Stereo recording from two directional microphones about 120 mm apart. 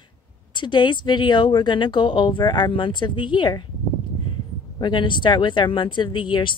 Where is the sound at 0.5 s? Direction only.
40° left (ahead or behind).